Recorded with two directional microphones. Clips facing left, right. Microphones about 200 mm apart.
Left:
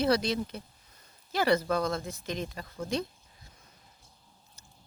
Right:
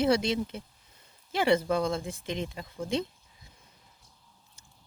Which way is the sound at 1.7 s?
25° right (ahead or behind).